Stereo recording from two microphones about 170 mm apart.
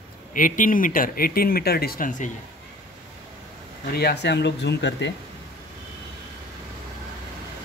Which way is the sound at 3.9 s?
75° left (ahead or behind).